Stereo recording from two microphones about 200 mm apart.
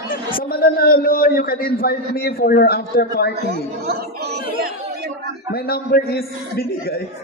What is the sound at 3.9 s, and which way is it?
Speech, 55° right (ahead or behind).